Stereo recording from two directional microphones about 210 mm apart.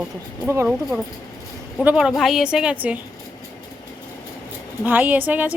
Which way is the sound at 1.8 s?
5° right (ahead or behind).